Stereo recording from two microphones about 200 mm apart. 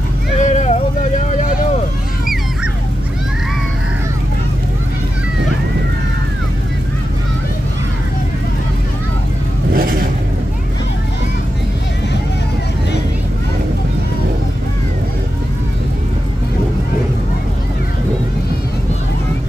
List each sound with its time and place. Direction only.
0.4 s vehicle: 35° left (ahead or behind)
9.8 s vehicle: 45° right (ahead or behind)